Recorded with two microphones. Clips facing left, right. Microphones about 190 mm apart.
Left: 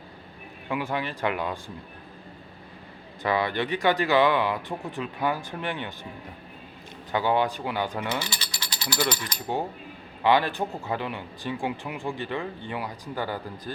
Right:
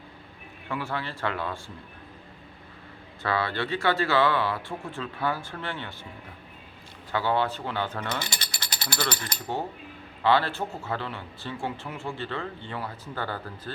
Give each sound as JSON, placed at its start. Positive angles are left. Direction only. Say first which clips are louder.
{"t": 0.7, "sound": "speech", "louder": "left 3 dB", "side_deg": 15}
{"t": 3.2, "sound": "speech", "louder": "left 2 dB", "side_deg": 15}
{"t": 7.1, "sound": "speech", "louder": "left 2 dB", "side_deg": 15}
{"t": 8.4, "sound": "ratchet", "louder": "left 1 dB", "side_deg": -50}
{"t": 10.2, "sound": "speech", "louder": "left 1 dB", "side_deg": 15}